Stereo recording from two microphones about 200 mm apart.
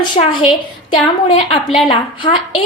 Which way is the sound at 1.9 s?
25° left (ahead or behind).